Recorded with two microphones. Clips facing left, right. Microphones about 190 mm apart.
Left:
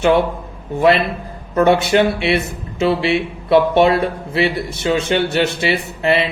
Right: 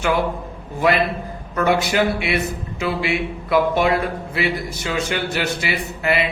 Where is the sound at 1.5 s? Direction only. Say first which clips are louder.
Left 5 dB; 25° left (ahead or behind).